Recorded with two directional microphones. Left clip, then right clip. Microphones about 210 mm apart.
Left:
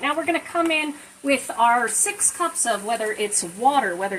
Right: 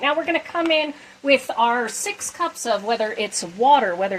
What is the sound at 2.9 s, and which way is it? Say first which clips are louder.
Speech: right 2 dB; 45° right (ahead or behind).